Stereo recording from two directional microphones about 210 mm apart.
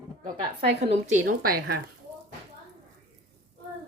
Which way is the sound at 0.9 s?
35° right (ahead or behind).